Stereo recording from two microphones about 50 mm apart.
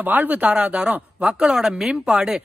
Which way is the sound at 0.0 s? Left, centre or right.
Right.